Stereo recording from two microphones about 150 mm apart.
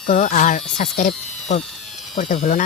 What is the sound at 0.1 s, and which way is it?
Speech, 60° left (ahead or behind).